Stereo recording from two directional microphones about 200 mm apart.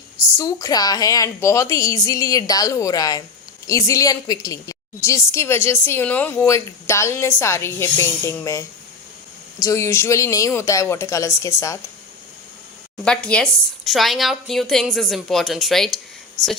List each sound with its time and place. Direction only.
0.3 s a woman's voice: 20° left (ahead or behind)
13.1 s a woman's voice: 5° left (ahead or behind)